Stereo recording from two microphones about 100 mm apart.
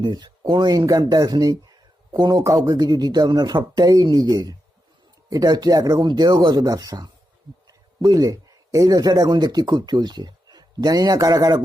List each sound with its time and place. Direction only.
0.0 s speech: 45° right (ahead or behind)